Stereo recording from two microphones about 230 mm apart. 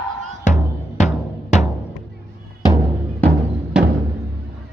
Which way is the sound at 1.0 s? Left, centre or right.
Left.